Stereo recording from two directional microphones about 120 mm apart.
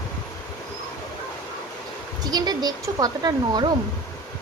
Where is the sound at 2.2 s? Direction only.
35° right (ahead or behind).